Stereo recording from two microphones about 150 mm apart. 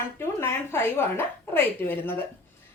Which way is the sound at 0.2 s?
15° left (ahead or behind).